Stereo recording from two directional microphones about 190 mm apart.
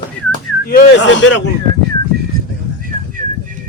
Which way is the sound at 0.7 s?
55° left (ahead or behind).